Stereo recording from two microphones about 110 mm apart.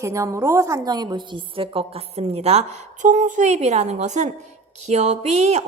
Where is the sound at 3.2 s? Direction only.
90° right.